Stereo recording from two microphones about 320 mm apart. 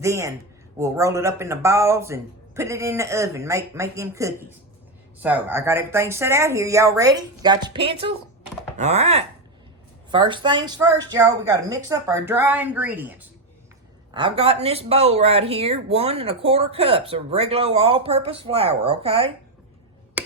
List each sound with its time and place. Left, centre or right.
0.0 s speech: centre
20.2 s tick-tock: centre